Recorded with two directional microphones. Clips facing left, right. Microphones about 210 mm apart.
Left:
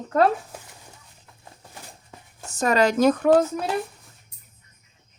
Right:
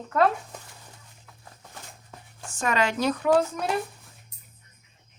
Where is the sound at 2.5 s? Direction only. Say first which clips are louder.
Left 6 dB; 40° left (ahead or behind).